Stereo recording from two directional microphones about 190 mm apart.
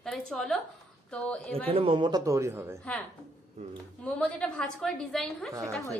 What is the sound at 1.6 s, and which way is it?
Speech, 30° right (ahead or behind).